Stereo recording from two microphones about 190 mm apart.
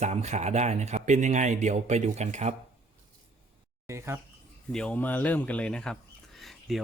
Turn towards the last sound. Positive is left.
turn(degrees=0)  # may be behind; listen again after turning